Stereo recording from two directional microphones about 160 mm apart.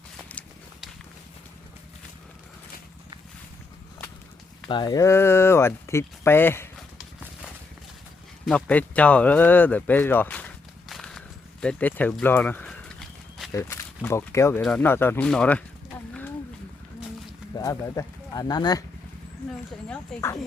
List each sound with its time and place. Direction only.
4.7 s speech: 25° left (ahead or behind)
6.7 s horse: centre (ahead or behind)
8.4 s speech: 5° left (ahead or behind)
11.6 s a sound: 10° left (ahead or behind)
13.5 s speech: 15° left (ahead or behind)
17.6 s speech: 20° left (ahead or behind)
19.9 s speech: 15° left (ahead or behind)